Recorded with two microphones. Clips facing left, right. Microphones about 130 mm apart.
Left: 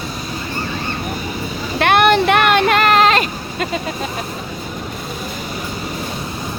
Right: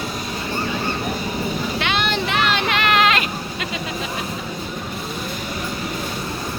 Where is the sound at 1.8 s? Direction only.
55° left (ahead or behind); by 3.7 s 40° left (ahead or behind).